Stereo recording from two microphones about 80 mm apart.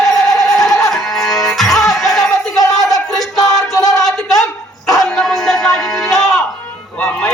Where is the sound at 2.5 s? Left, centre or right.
Left.